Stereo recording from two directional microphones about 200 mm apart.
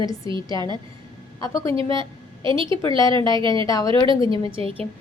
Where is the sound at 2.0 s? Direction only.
25° right (ahead or behind).